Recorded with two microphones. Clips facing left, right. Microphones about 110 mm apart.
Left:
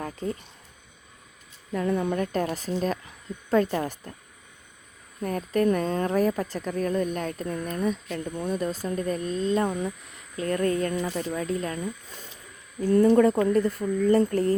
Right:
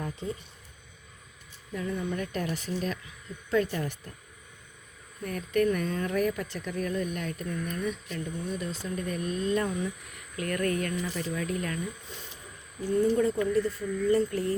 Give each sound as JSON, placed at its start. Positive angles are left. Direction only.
{"t": 0.2, "sound": "speech", "side_deg": 5}
{"t": 1.7, "sound": "speech", "side_deg": 55}
{"t": 2.1, "sound": "speech", "side_deg": 40}
{"t": 5.2, "sound": "speech", "side_deg": 35}
{"t": 8.1, "sound": "speech", "side_deg": 50}
{"t": 12.9, "sound": "speech", "side_deg": 70}
{"t": 13.4, "sound": "speech", "side_deg": 45}